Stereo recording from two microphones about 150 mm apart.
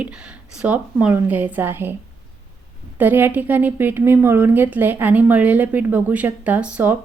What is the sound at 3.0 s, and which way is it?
A woman's voice, 15° right (ahead or behind).